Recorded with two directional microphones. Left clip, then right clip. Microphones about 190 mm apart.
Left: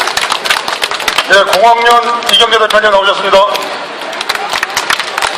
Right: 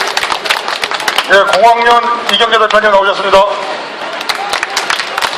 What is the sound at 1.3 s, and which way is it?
A man's voice, 30° left (ahead or behind).